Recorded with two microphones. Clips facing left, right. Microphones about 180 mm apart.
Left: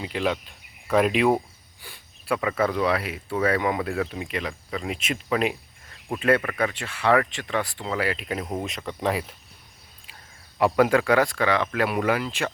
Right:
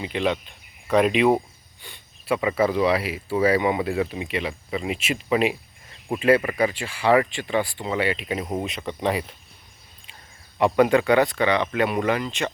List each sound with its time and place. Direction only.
0.0 s speech: centre (ahead or behind)
10.6 s speech: centre (ahead or behind)